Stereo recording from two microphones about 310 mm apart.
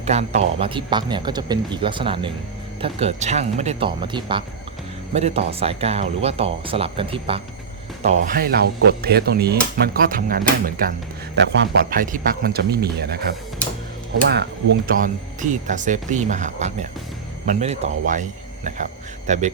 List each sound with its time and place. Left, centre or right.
0.0 s speech: right
14.8 s speech: right